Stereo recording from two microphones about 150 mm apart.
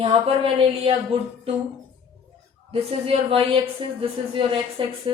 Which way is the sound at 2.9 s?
40° right (ahead or behind).